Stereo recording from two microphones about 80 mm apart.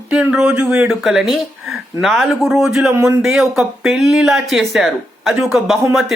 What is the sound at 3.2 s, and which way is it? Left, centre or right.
Speech, centre.